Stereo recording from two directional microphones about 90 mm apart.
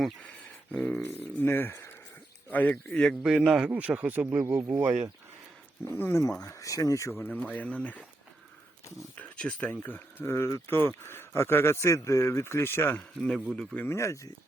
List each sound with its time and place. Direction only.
0.7 s speech: 15° left (ahead or behind)
3.2 s a man's voice: 10° right (ahead or behind)
6.0 s speech: 30° left (ahead or behind)
7.2 s speech: 15° left (ahead or behind)
9.3 s speech: 15° left (ahead or behind)
13.0 s speech: 10° left (ahead or behind)
13.7 s speech: 30° left (ahead or behind)